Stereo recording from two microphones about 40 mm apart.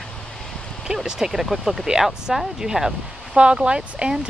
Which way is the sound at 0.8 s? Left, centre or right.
Centre.